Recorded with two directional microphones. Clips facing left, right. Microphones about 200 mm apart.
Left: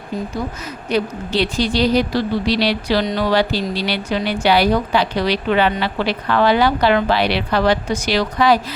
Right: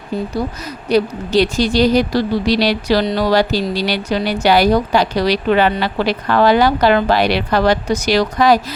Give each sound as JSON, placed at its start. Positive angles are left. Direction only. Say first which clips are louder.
{"t": 0.9, "sound": "speech", "louder": "right 5 dB", "side_deg": -40}